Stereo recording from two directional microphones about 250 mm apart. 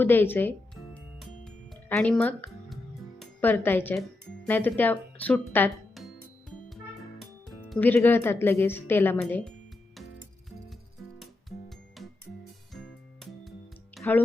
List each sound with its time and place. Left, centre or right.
0.0 s music: centre
3.2 s speech: centre
7.2 s speech: centre
13.9 s music: centre